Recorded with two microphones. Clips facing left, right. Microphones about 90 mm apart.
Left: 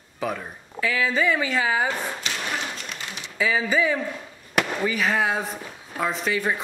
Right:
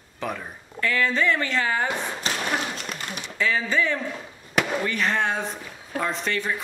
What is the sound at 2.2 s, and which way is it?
Thump, 35° right (ahead or behind).